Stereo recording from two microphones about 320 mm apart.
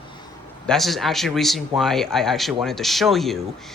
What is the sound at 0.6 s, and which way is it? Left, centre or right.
Speech, centre.